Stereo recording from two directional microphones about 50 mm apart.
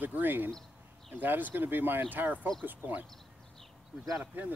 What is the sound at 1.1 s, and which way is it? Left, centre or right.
Speech, right.